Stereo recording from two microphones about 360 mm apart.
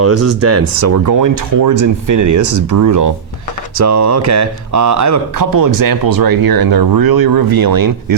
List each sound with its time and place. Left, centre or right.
0.0 s speech: right
3.8 s speech: right